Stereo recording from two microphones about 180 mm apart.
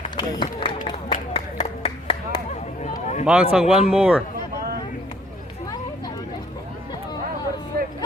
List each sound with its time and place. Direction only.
0.2 s run: 25° left (ahead or behind)
0.9 s clapping: 35° left (ahead or behind)
2.8 s a sound: 40° left (ahead or behind)
3.2 s speech: 5° right (ahead or behind)